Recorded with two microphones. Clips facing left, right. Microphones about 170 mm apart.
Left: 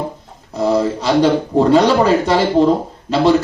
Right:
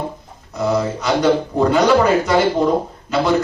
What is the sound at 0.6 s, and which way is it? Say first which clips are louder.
A man's voice: left 3 dB; 30° left (ahead or behind).